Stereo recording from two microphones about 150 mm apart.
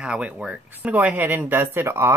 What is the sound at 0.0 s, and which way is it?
Speech, 10° right (ahead or behind).